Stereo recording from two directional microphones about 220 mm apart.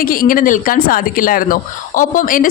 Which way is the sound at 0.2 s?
40° left (ahead or behind).